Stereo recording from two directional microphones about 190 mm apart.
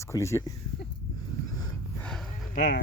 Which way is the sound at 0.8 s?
65° left (ahead or behind).